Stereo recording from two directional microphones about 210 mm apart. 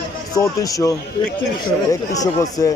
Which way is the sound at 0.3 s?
15° left (ahead or behind).